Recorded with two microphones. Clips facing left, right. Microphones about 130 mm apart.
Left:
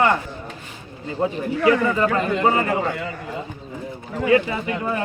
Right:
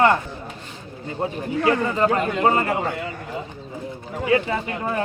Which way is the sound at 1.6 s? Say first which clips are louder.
Left 2 dB; 30° right (ahead or behind).